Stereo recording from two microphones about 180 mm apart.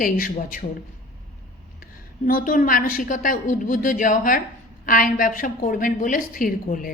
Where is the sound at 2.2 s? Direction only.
50° left (ahead or behind).